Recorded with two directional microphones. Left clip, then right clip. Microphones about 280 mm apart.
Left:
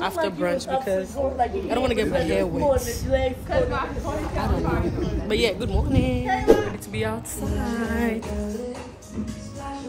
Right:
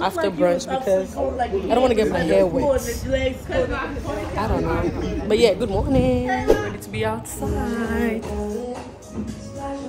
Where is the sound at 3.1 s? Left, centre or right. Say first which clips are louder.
Even; centre.